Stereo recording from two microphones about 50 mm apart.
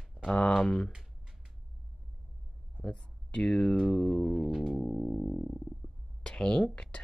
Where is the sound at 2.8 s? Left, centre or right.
Centre.